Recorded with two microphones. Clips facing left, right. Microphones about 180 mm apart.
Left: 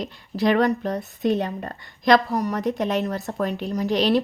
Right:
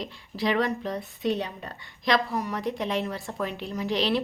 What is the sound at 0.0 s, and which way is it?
A woman's voice, 45° left (ahead or behind).